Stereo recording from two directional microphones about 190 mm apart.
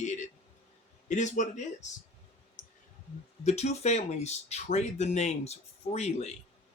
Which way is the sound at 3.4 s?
35° left (ahead or behind).